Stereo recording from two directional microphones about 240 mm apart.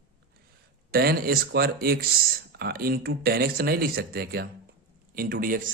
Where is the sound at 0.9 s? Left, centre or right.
Right.